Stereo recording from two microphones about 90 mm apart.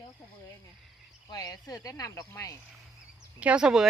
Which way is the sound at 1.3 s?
40° left (ahead or behind).